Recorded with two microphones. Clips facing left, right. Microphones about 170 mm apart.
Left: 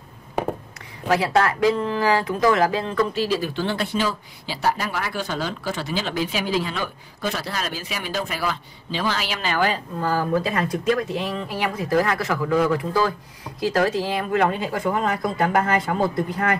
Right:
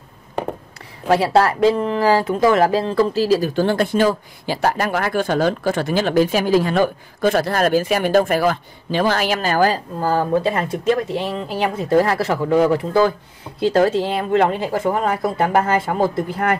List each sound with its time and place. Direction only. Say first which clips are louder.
1.0 s speech: right 4 dB; 30° right (ahead or behind)